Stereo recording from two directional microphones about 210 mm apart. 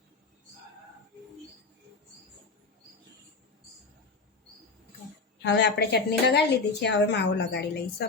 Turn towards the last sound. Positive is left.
turn(degrees=55)  # may be behind; listen again after turning